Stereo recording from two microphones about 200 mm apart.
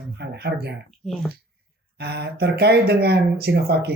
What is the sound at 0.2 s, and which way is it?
Speech, 55° right (ahead or behind).